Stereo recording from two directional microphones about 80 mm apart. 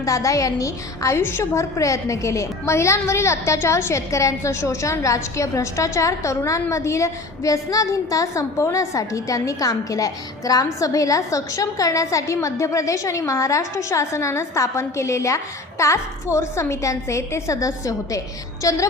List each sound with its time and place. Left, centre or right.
0.0 s a woman's voice: left